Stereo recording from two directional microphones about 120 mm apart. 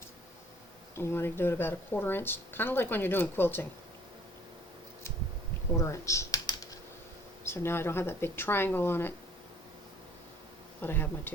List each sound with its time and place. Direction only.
0.9 s speech: 20° left (ahead or behind)
5.7 s speech: 25° left (ahead or behind)
7.4 s speech: 20° left (ahead or behind)
10.8 s speech: 15° left (ahead or behind)